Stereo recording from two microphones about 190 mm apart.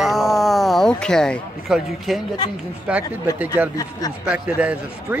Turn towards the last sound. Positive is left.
turn(degrees=-5)  # may be behind; listen again after turning